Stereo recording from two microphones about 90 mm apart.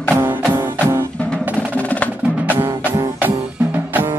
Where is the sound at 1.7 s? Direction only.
15° left (ahead or behind).